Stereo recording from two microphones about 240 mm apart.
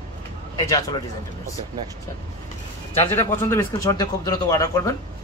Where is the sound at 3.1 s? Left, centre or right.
Centre.